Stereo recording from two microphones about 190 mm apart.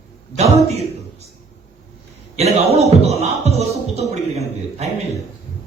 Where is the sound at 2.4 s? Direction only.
35° right (ahead or behind).